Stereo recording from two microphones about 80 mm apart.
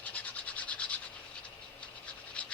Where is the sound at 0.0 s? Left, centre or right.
Centre.